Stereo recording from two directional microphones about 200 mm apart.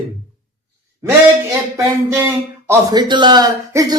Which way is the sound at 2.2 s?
15° right (ahead or behind).